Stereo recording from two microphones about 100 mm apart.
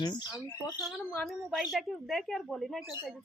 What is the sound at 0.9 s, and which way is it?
Speech, centre (ahead or behind).